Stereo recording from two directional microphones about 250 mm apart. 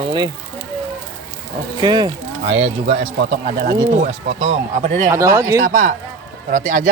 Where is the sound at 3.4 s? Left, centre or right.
Right.